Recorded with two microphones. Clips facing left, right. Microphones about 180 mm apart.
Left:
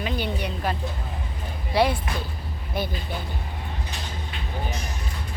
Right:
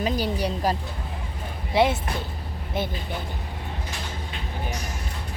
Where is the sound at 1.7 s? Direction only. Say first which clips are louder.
Right 1 dB; 20° right (ahead or behind).